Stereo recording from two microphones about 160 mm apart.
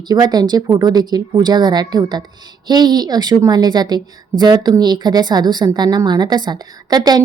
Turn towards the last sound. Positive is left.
turn(degrees=-25)  # may be behind; listen again after turning